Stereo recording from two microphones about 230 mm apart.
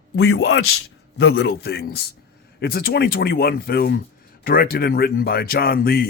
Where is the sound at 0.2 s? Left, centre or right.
Left.